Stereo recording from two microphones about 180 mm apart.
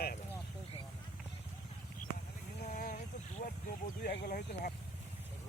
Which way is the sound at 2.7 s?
45° left (ahead or behind).